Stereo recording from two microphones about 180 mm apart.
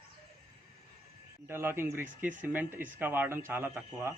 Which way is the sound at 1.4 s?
15° right (ahead or behind).